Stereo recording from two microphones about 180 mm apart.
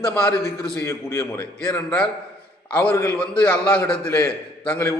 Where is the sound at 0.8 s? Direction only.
15° left (ahead or behind).